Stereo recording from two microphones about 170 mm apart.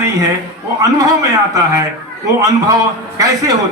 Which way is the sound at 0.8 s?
20° right (ahead or behind).